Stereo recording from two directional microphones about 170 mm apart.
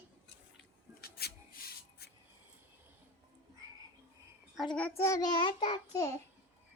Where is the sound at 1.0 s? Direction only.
70° left (ahead or behind).